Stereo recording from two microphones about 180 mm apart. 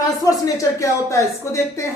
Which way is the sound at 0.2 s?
20° left (ahead or behind).